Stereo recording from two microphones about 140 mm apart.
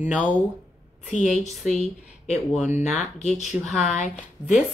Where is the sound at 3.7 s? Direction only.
5° left (ahead or behind).